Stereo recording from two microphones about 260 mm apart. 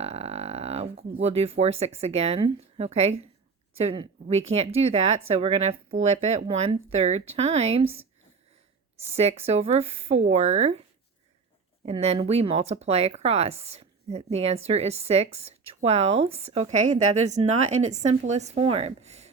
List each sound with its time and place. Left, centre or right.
0.0 s speech: right
11.9 s speech: right